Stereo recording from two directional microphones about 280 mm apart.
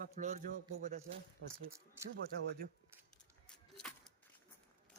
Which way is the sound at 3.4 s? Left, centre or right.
Centre.